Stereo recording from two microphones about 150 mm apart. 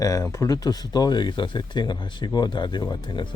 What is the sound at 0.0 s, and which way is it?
Speech, 20° left (ahead or behind).